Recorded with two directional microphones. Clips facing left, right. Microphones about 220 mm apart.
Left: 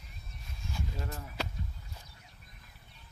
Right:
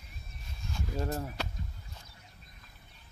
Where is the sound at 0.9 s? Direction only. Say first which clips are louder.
Right 8 dB; 40° right (ahead or behind).